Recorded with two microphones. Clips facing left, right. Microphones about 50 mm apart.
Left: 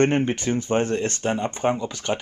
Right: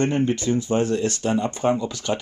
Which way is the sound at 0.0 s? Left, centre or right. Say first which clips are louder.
Left 1 dB; left.